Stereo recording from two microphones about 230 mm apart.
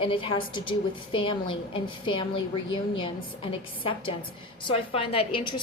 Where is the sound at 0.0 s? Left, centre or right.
Left.